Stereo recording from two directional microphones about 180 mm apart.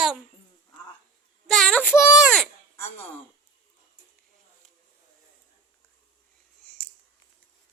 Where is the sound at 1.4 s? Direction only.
5° left (ahead or behind).